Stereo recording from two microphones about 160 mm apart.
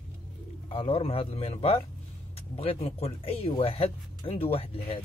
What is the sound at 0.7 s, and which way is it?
Speech, 35° left (ahead or behind).